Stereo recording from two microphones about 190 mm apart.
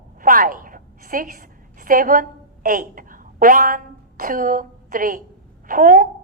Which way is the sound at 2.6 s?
45° right (ahead or behind).